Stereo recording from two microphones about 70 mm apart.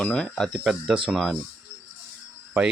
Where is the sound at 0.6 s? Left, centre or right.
Centre.